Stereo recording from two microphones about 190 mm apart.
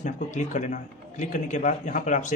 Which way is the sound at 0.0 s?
40° left (ahead or behind).